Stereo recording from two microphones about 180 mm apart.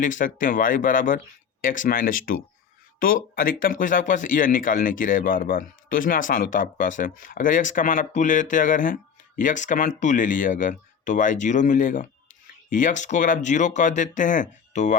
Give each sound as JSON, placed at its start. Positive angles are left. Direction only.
{"t": 0.0, "sound": "speech", "side_deg": 45}